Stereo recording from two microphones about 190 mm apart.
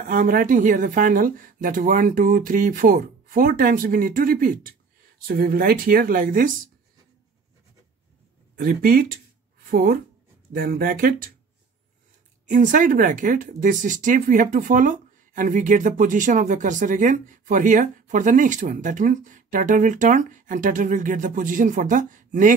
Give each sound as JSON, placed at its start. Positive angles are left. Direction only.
{"t": 0.0, "sound": "speech", "side_deg": -45}
{"t": 8.5, "sound": "speech", "side_deg": -50}
{"t": 12.4, "sound": "speech", "side_deg": -40}